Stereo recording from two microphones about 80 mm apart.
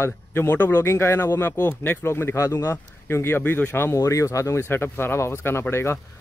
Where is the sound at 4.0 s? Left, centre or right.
Left.